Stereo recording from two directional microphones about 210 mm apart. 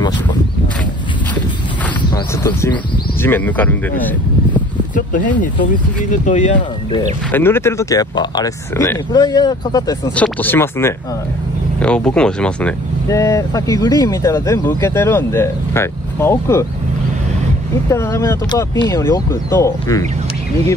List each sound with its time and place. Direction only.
2.1 s speech: 15° left (ahead or behind)
6.0 s speech: 35° left (ahead or behind)
7.2 s speech: 10° left (ahead or behind)
17.8 s speech: 15° left (ahead or behind)